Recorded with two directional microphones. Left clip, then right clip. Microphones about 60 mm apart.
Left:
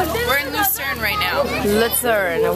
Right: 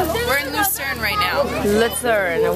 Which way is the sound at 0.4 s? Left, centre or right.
Centre.